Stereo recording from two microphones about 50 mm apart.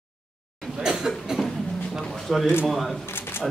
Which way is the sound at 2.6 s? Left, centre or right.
Centre.